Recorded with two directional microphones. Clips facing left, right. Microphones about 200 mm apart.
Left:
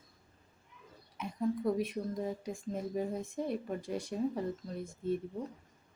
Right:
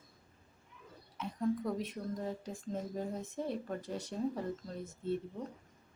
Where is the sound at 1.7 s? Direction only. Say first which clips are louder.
Left 4 dB; 10° left (ahead or behind).